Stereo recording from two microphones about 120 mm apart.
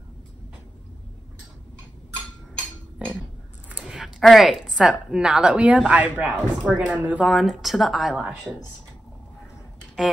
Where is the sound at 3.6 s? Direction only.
10° right (ahead or behind).